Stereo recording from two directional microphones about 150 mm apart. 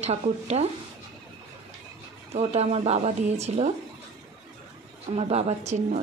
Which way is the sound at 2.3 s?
45° right (ahead or behind).